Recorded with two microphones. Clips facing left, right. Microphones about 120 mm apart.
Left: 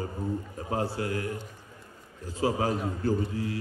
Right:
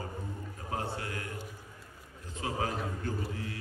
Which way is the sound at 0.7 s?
35° left (ahead or behind).